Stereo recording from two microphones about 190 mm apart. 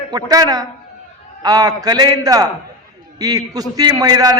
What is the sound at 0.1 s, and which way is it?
A man's voice, 20° right (ahead or behind).